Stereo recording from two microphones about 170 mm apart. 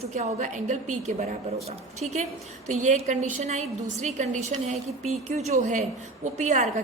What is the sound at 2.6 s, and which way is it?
A woman's voice, 45° right (ahead or behind).